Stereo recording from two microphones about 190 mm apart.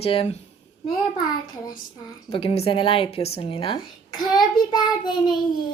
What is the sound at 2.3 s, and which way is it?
A child's voice, 30° left (ahead or behind).